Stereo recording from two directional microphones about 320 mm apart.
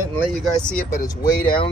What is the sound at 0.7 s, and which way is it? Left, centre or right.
Speech, left.